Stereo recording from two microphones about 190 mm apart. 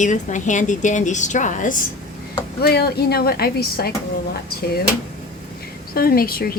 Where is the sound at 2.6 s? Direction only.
55° left (ahead or behind).